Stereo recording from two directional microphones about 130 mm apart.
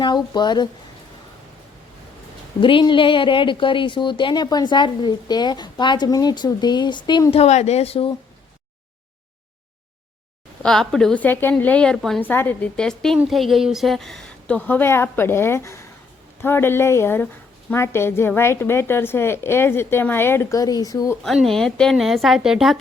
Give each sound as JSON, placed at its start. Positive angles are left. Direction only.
{"t": 0.0, "sound": "a woman's voice", "side_deg": 35}
{"t": 2.6, "sound": "a woman's voice", "side_deg": 40}
{"t": 7.3, "sound": "speech", "side_deg": 55}
{"t": 10.6, "sound": "a woman's voice", "side_deg": 5}
{"t": 12.2, "sound": "a woman's voice", "side_deg": 15}
{"t": 21.2, "sound": "a woman's voice", "side_deg": 0}